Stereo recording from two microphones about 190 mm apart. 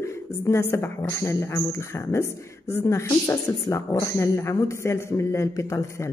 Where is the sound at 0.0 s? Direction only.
15° left (ahead or behind).